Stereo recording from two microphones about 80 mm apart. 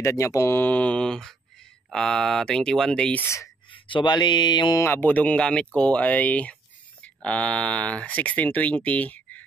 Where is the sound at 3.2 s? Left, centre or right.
Left.